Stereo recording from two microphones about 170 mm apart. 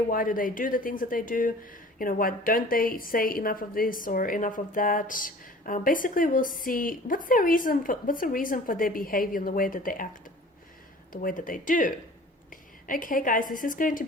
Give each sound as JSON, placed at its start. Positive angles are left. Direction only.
{"t": 0.1, "sound": "a woman's voice", "side_deg": 55}
{"t": 11.1, "sound": "a woman's voice", "side_deg": 55}